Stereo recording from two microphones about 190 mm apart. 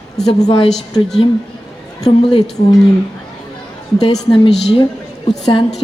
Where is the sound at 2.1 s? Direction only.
30° left (ahead or behind).